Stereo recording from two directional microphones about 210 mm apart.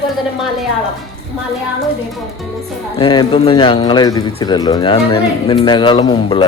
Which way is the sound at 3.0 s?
25° left (ahead or behind).